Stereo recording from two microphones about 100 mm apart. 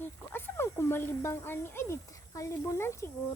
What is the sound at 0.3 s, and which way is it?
Speech, 25° left (ahead or behind).